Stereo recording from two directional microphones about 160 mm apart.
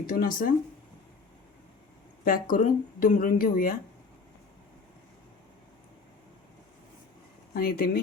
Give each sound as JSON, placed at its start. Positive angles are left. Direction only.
{"t": 0.1, "sound": "speech", "side_deg": 60}
{"t": 2.2, "sound": "speech", "side_deg": 60}
{"t": 7.5, "sound": "speech", "side_deg": 70}